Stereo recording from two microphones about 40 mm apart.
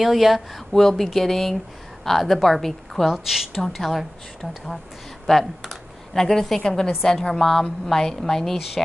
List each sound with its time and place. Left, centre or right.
0.0 s speech: centre
3.1 s speech: centre
5.2 s a woman's voice: centre